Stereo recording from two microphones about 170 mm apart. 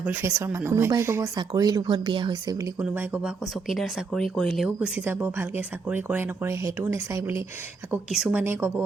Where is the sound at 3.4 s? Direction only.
Centre (ahead or behind); by 7.4 s 20° right (ahead or behind).